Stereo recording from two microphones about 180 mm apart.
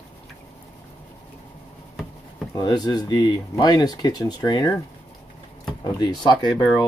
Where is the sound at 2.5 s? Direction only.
25° left (ahead or behind).